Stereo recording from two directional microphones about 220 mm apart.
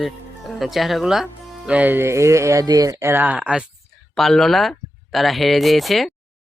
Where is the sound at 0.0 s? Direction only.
Centre (ahead or behind).